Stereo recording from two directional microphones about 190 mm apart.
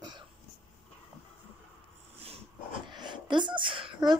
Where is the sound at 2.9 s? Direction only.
25° right (ahead or behind).